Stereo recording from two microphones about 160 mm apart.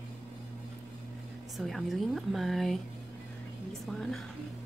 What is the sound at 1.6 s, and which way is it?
A woman's voice, centre (ahead or behind).